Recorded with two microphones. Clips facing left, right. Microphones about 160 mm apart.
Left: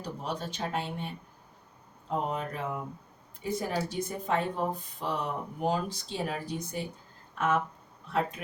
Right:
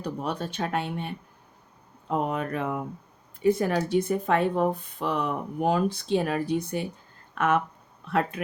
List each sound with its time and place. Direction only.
0.0 s speech: 60° right (ahead or behind)